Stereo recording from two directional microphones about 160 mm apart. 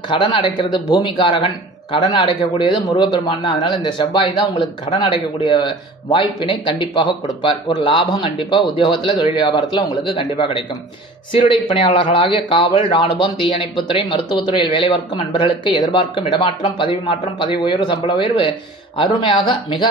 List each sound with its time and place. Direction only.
0.1 s speech: 30° left (ahead or behind)